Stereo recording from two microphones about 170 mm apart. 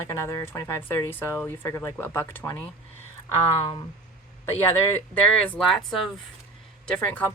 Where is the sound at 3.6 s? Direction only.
30° left (ahead or behind).